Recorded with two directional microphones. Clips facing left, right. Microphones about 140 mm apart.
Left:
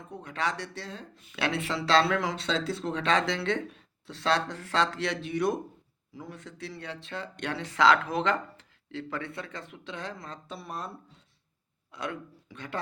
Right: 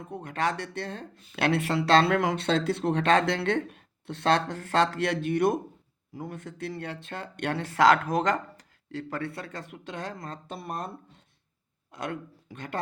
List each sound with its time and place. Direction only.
0.1 s speech: 50° right (ahead or behind)